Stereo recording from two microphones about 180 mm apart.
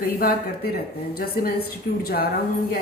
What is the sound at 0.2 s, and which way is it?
A woman's voice, 55° left (ahead or behind).